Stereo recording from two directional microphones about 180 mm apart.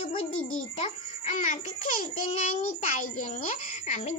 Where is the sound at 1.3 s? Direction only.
45° left (ahead or behind).